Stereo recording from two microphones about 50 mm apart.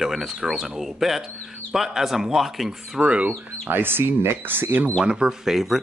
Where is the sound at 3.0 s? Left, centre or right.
Right.